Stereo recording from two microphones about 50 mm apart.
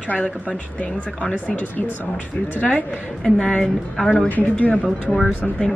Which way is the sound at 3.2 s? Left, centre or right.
Centre.